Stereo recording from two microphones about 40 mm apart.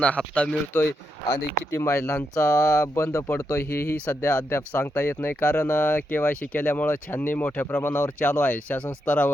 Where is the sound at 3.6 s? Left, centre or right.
Left.